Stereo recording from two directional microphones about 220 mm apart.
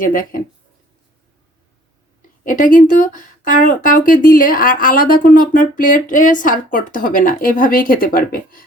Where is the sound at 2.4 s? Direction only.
35° left (ahead or behind).